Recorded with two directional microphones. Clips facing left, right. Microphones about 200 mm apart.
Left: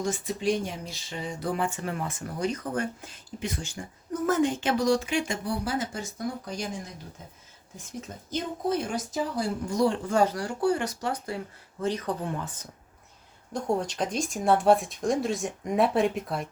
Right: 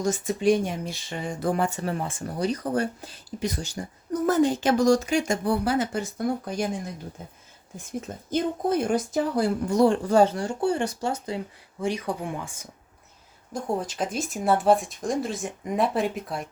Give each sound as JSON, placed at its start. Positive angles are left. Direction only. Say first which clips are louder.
{"t": 0.0, "sound": "speech", "louder": "right 5 dB", "side_deg": -45}
{"t": 5.6, "sound": "a woman's voice", "louder": "right 6 dB", "side_deg": -65}
{"t": 8.0, "sound": "a woman's voice", "louder": "right 7 dB", "side_deg": -55}
{"t": 10.1, "sound": "speech", "louder": "right 5 dB", "side_deg": -30}